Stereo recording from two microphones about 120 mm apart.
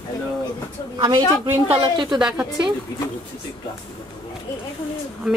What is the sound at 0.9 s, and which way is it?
Speech, 35° right (ahead or behind).